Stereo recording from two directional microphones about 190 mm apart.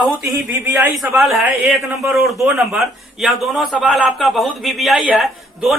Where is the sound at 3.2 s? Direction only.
Centre (ahead or behind).